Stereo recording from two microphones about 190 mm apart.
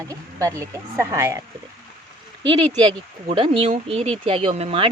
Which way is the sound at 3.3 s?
30° right (ahead or behind).